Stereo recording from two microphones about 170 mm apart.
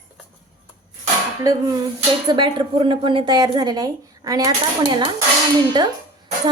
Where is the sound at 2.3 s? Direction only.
30° right (ahead or behind).